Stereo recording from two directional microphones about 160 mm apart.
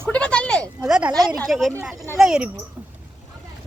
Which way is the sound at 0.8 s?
5° right (ahead or behind).